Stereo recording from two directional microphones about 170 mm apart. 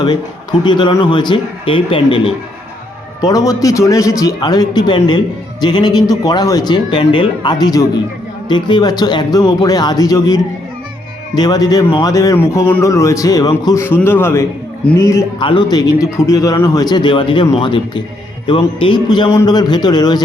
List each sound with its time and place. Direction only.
0.6 s a man's voice: 25° left (ahead or behind)
3.2 s a man's voice: 20° left (ahead or behind)
15.4 s a man's voice: 30° left (ahead or behind)